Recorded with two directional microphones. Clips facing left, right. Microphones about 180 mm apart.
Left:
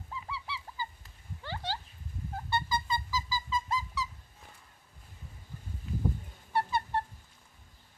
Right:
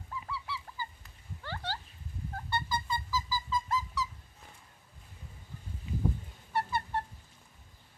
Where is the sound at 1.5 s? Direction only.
15° left (ahead or behind).